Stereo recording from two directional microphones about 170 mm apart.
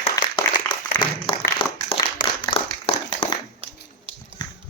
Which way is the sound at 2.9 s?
30° left (ahead or behind).